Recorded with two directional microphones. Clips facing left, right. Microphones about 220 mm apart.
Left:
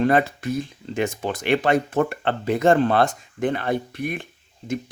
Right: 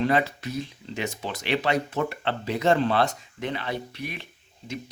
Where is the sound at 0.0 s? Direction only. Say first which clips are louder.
Left 4 dB; 50° left (ahead or behind).